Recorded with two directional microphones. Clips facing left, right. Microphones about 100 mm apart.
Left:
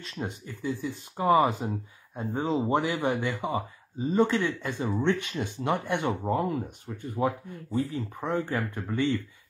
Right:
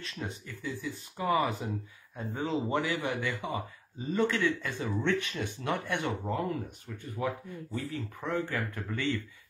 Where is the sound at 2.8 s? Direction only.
45° left (ahead or behind).